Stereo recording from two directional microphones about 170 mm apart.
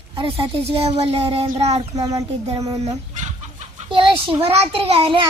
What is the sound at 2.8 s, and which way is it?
Chicken, 40° right (ahead or behind).